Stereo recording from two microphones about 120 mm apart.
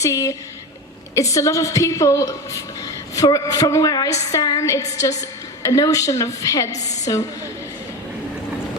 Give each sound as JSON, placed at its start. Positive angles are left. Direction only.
{"t": 0.0, "sound": "a woman's voice", "side_deg": 25}